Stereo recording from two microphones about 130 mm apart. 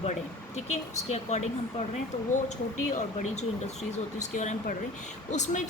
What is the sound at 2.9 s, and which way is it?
A woman's voice, 65° left (ahead or behind).